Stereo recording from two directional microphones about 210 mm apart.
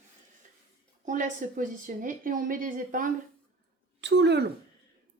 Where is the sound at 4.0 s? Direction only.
55° right (ahead or behind).